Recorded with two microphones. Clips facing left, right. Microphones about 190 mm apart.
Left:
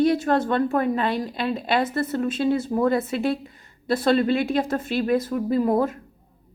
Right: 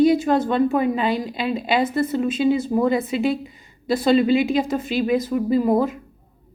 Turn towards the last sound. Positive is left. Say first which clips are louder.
# right 2 dB
turn(degrees=-5)  # may be behind; listen again after turning